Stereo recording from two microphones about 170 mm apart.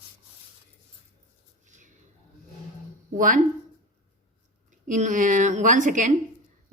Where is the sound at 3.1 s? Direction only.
50° right (ahead or behind).